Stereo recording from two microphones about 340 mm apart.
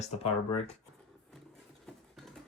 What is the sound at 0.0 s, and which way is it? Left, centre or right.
Speech, centre.